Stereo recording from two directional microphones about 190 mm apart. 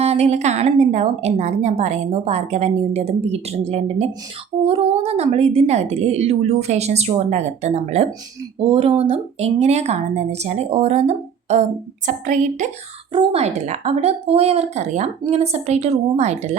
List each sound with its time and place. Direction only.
0.0 s a woman's voice: 35° right (ahead or behind)